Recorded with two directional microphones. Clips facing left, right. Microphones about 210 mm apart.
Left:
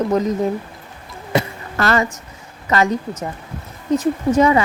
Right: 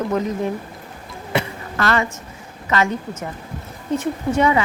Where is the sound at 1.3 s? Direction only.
40° left (ahead or behind).